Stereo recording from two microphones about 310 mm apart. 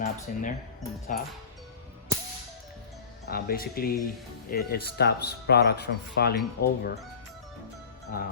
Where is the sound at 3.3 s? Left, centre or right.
Left.